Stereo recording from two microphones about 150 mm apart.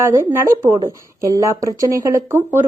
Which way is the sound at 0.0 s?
15° right (ahead or behind).